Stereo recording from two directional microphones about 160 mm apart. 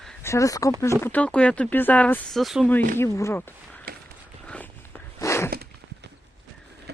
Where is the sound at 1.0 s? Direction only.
10° left (ahead or behind).